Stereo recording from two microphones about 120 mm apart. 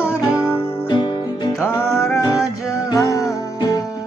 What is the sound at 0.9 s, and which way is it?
Music, 35° left (ahead or behind).